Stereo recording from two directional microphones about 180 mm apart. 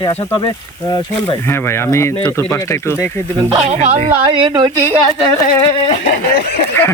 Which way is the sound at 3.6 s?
35° right (ahead or behind).